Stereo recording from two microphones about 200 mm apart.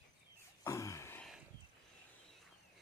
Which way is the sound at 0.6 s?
15° left (ahead or behind).